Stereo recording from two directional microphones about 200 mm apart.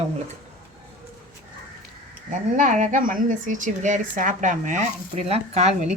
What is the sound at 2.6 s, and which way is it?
A woman's voice, 40° right (ahead or behind).